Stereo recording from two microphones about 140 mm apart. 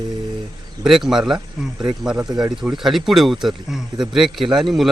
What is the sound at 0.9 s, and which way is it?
Speech, 5° right (ahead or behind).